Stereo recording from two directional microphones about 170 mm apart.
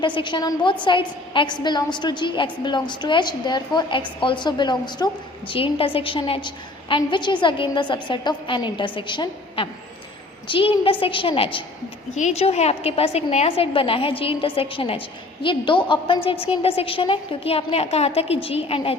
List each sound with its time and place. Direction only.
0.0 s a woman's voice: 30° left (ahead or behind)